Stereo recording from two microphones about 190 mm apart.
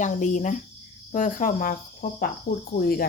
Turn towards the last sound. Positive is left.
turn(degrees=50)  # may be behind; listen again after turning